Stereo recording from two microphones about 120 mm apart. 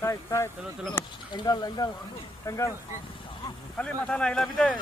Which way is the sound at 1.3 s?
35° left (ahead or behind).